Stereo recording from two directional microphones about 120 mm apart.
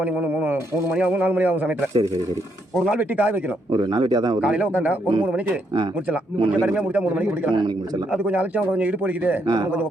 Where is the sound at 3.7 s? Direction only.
40° right (ahead or behind).